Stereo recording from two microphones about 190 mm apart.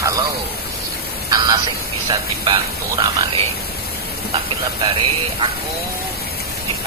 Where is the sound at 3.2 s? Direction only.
30° right (ahead or behind).